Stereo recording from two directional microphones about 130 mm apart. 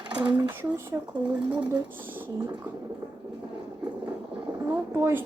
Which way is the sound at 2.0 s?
15° right (ahead or behind).